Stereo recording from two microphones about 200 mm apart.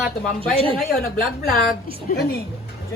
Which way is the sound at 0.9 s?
50° left (ahead or behind).